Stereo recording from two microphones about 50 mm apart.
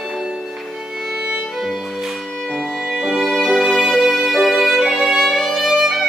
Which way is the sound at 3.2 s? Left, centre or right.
Centre.